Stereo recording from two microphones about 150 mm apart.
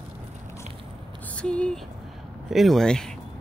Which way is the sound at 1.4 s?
5° left (ahead or behind).